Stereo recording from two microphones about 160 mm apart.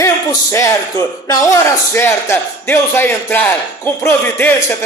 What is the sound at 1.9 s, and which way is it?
A man's voice, 15° left (ahead or behind).